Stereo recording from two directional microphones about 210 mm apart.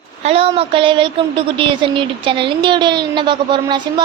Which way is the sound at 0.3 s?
25° right (ahead or behind).